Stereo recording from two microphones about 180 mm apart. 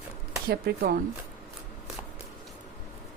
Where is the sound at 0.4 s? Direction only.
60° right (ahead or behind).